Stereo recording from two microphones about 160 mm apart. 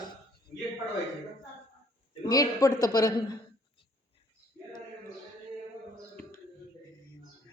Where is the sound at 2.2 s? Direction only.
20° left (ahead or behind).